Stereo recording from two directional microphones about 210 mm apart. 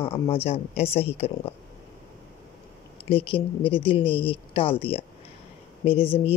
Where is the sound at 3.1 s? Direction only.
25° left (ahead or behind).